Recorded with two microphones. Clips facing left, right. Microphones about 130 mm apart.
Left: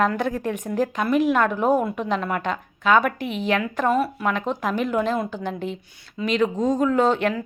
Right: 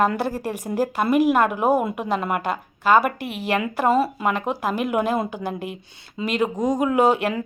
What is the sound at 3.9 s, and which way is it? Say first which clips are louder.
Speech: right 2 dB; 30° right (ahead or behind).